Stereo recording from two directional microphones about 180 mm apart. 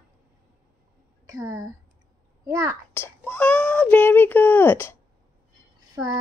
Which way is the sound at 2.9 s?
10° left (ahead or behind).